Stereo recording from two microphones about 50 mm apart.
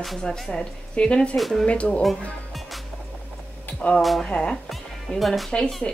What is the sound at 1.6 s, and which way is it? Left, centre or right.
Speech, left.